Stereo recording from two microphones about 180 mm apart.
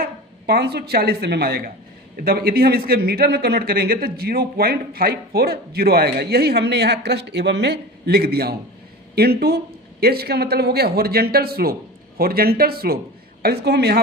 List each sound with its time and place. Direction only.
0.0 s a man's voice: 60° right (ahead or behind)